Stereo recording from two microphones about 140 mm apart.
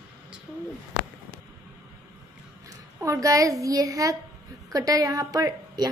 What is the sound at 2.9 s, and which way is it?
A woman's voice, 20° right (ahead or behind).